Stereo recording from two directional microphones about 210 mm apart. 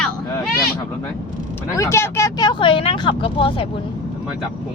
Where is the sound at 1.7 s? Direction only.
15° left (ahead or behind).